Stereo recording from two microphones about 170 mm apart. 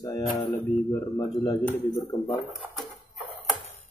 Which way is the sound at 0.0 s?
20° left (ahead or behind).